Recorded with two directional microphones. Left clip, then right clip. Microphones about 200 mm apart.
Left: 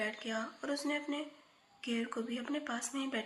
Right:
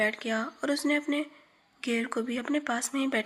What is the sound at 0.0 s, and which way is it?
Speech, 40° right (ahead or behind).